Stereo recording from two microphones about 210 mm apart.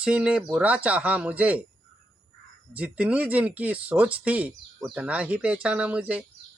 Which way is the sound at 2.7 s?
5° right (ahead or behind).